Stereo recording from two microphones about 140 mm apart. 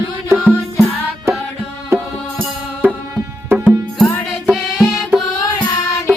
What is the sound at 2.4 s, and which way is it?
Music, 15° right (ahead or behind).